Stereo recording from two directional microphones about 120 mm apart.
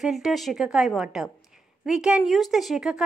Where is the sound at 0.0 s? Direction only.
Centre (ahead or behind).